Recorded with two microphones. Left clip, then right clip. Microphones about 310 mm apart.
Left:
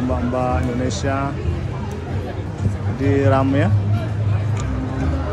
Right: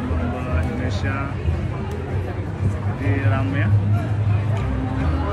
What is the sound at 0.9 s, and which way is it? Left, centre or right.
Speech, centre.